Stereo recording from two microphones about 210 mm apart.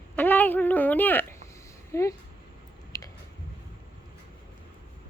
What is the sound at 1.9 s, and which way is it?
Speech, 15° left (ahead or behind).